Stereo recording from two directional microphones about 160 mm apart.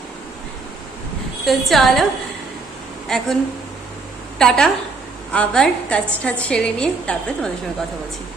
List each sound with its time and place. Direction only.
1.5 s a woman's voice: centre (ahead or behind)
3.1 s a woman's voice: 5° left (ahead or behind)
4.4 s a woman's voice: 5° left (ahead or behind)